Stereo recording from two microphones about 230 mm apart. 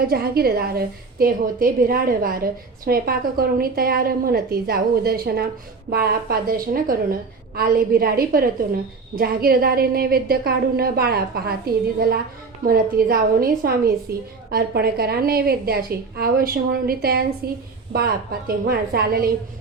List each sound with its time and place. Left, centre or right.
0.1 s a woman's voice: right